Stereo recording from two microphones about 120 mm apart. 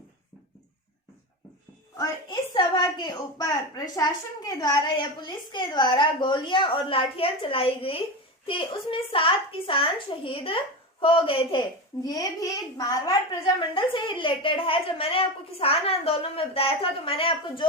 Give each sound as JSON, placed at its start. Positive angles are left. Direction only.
{"t": 2.0, "sound": "a woman's voice", "side_deg": 40}
{"t": 12.0, "sound": "a woman's voice", "side_deg": 30}